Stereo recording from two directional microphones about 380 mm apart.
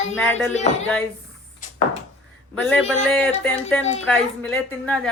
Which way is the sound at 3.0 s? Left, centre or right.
Centre.